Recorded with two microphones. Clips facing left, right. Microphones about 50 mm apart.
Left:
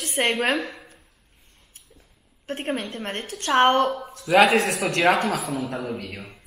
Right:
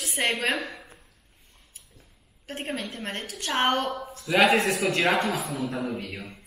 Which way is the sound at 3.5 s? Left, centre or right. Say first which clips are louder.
Left 8 dB; centre.